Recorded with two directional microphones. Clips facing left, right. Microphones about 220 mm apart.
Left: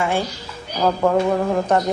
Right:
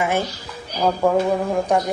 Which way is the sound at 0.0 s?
20° right (ahead or behind).